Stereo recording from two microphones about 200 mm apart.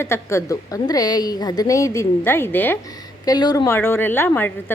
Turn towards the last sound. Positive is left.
turn(degrees=10)  # may be behind; listen again after turning